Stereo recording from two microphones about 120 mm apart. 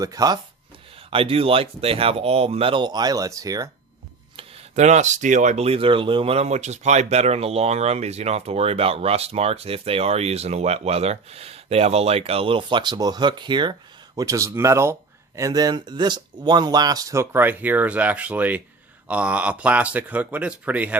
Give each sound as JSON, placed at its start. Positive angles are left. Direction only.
{"t": 0.0, "sound": "speech", "side_deg": -30}
{"t": 0.9, "sound": "speech", "side_deg": -50}
{"t": 4.7, "sound": "speech", "side_deg": -75}
{"t": 14.2, "sound": "speech", "side_deg": -25}